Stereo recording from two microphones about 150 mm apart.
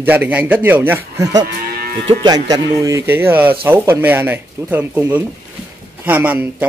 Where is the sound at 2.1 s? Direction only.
30° right (ahead or behind).